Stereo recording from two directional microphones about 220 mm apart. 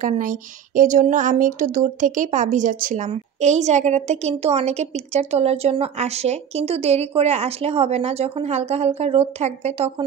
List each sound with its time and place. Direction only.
0.0 s speech: 35° right (ahead or behind)